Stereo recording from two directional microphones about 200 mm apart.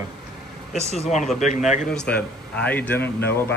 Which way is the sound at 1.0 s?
35° left (ahead or behind).